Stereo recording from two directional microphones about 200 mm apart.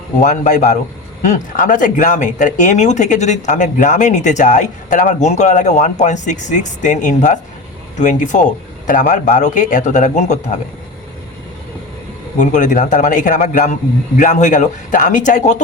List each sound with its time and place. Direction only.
0.2 s speech: 40° left (ahead or behind)
12.4 s speech: 40° left (ahead or behind)